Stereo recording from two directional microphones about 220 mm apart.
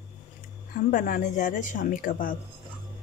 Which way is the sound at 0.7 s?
35° left (ahead or behind).